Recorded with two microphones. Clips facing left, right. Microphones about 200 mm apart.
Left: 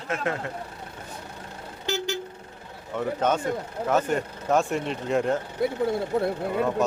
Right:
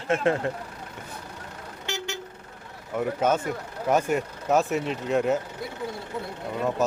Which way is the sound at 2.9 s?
10° right (ahead or behind).